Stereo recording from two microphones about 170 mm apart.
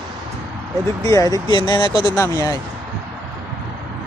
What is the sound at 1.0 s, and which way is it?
Speech, 20° left (ahead or behind).